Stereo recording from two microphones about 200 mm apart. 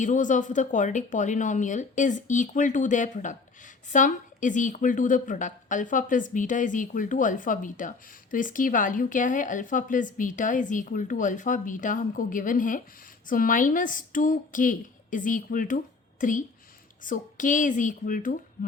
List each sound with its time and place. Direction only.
0.0 s a woman's voice: 40° left (ahead or behind)